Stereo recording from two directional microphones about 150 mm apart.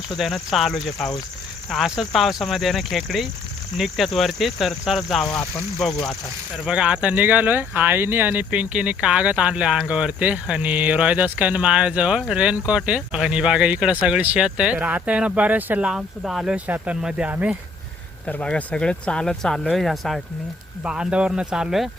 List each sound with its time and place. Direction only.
0.2 s speech: centre (ahead or behind)
5.2 s speech: 20° left (ahead or behind)
6.7 s speech: 5° right (ahead or behind)
18.3 s speech: 10° left (ahead or behind)